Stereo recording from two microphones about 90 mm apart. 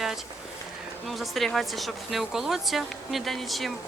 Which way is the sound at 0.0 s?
5° right (ahead or behind).